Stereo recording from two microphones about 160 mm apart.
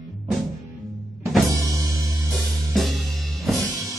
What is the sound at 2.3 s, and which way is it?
Music, centre (ahead or behind).